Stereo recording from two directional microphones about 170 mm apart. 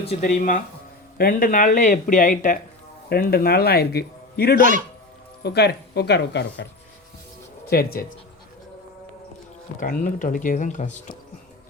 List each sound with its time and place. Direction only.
0.0 s speech: 40° left (ahead or behind)
3.1 s a man's voice: 65° left (ahead or behind); by 6.7 s 85° left
7.7 s a man's voice: 60° left (ahead or behind)
9.8 s speech: 50° left (ahead or behind)